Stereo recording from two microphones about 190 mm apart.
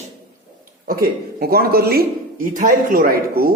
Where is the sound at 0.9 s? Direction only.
50° right (ahead or behind).